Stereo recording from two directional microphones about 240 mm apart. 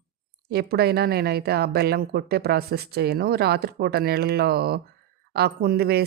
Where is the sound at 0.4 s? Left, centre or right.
Right.